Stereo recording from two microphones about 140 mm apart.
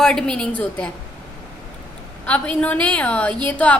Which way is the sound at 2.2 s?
10° left (ahead or behind).